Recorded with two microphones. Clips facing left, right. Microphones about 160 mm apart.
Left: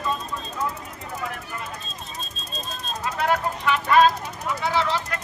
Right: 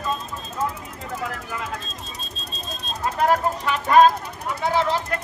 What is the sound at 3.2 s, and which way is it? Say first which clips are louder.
Speech: right 3 dB; 40° right (ahead or behind).